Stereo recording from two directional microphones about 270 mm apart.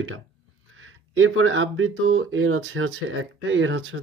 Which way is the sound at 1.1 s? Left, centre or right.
Right.